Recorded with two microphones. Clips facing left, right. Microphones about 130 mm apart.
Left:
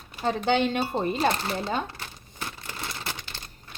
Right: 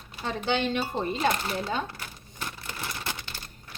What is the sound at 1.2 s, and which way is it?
Speech, 30° left (ahead or behind).